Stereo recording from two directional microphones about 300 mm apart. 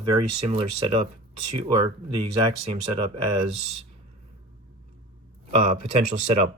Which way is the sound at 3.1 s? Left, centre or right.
Right.